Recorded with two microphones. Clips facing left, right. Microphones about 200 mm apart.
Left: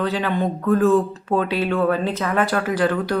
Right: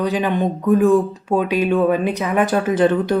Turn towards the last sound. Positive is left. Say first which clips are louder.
# right 4 dB
turn(degrees=-25)  # may be behind; listen again after turning